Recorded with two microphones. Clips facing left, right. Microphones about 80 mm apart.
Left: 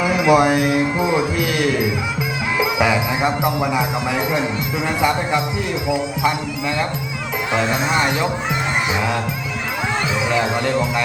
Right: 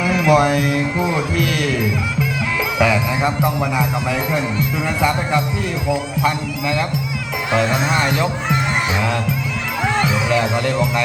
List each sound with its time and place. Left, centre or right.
0.0 s speech: centre
10.0 s speech: centre